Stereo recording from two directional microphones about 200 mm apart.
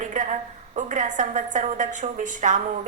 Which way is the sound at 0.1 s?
40° right (ahead or behind).